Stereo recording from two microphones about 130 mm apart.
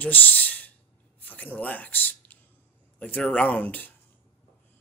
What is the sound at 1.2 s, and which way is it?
Speech, 15° left (ahead or behind).